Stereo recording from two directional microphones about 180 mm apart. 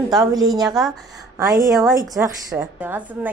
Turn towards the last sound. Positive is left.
turn(degrees=-10)  # may be behind; listen again after turning